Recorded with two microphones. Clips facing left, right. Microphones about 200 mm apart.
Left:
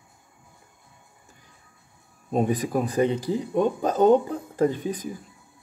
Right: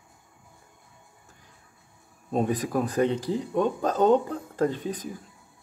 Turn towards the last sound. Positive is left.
turn(degrees=10)  # may be behind; listen again after turning